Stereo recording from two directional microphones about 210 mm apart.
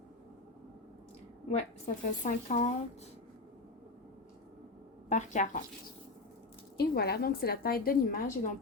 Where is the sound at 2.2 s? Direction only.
35° left (ahead or behind).